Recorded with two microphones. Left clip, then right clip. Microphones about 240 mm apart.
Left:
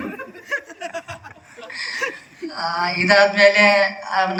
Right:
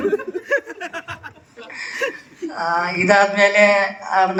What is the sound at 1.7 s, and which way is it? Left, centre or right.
Speech, centre.